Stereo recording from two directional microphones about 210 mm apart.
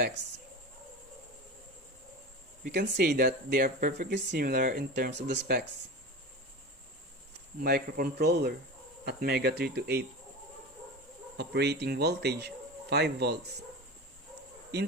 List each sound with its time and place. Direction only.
2.7 s speech: 55° right (ahead or behind)
7.6 s speech: 45° right (ahead or behind)
11.3 s speech: 50° right (ahead or behind)
14.7 s speech: 55° right (ahead or behind)